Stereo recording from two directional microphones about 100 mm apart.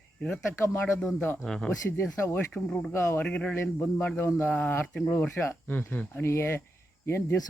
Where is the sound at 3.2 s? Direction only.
15° left (ahead or behind).